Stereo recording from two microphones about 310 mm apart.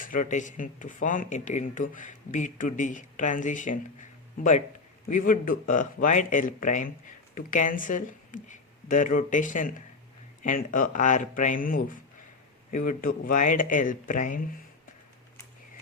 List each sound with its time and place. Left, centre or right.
0.0 s speech: left